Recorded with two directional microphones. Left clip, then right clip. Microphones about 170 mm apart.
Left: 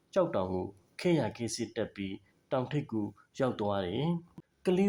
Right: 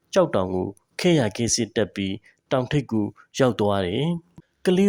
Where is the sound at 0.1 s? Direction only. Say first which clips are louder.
Right 9 dB; 45° right (ahead or behind).